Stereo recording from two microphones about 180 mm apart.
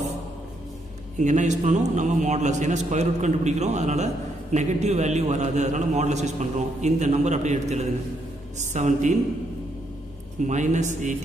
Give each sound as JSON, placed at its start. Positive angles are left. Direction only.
{"t": 1.2, "sound": "a man's voice", "side_deg": -40}
{"t": 10.4, "sound": "a man's voice", "side_deg": -40}